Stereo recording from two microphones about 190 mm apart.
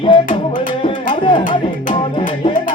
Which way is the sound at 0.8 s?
25° left (ahead or behind).